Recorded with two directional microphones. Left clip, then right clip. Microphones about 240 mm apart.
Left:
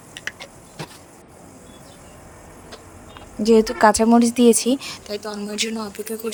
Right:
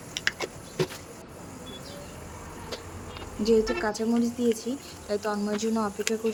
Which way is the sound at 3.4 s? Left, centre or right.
Left.